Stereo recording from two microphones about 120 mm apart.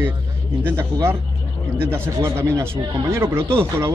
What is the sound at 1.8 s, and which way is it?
Speech, 25° right (ahead or behind).